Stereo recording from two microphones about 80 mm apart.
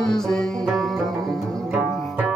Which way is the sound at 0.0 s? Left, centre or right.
Centre.